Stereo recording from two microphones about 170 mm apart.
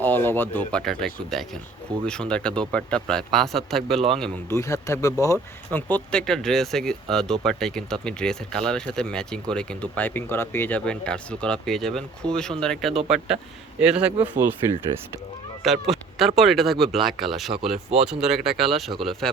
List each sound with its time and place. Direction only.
0.0 s speech: 10° left (ahead or behind)
4.4 s speech: 20° left (ahead or behind); by 14.1 s 5° right (ahead or behind)
14.9 s speech: 40° right (ahead or behind)
15.6 s speech: centre (ahead or behind)